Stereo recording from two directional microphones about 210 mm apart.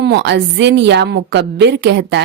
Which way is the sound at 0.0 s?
55° right (ahead or behind).